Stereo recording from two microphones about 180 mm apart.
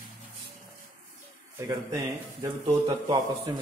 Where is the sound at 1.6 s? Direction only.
20° right (ahead or behind).